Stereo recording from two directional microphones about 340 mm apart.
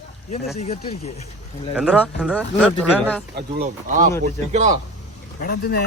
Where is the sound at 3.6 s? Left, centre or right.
Right.